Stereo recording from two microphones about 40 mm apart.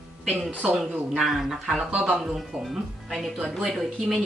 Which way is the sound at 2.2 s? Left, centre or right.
Centre.